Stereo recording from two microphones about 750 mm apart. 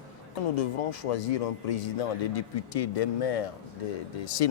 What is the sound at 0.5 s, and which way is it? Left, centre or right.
Speech, left.